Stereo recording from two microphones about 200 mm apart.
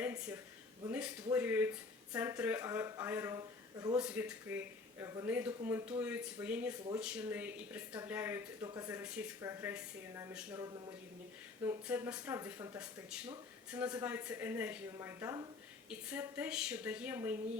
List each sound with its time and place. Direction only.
0.0 s a sound: 5° right (ahead or behind)
0.9 s speech: 5° right (ahead or behind)
3.9 s speech: 5° right (ahead or behind)